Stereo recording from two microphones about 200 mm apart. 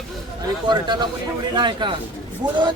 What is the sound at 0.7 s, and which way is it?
Speech, 20° right (ahead or behind).